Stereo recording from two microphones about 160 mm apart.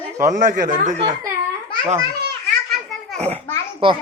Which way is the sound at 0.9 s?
25° right (ahead or behind).